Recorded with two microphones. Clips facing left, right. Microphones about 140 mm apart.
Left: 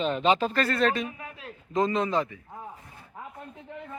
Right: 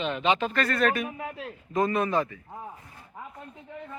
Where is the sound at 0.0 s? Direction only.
35° left (ahead or behind).